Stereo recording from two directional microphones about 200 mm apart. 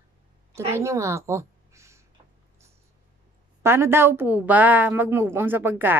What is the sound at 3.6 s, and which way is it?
A woman's voice, 10° right (ahead or behind).